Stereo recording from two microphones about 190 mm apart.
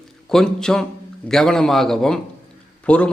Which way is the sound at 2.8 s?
5° left (ahead or behind).